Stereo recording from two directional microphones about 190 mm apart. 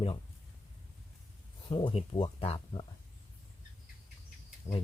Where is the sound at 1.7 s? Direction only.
25° left (ahead or behind).